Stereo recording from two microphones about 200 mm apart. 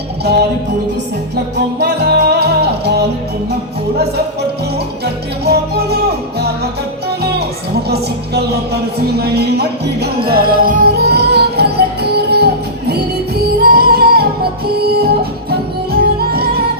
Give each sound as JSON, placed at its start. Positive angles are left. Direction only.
{"t": 1.8, "sound": "music", "side_deg": -55}
{"t": 7.2, "sound": "music", "side_deg": -55}